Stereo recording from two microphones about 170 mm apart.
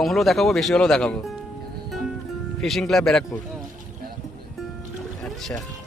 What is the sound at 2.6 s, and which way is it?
Speech, centre (ahead or behind).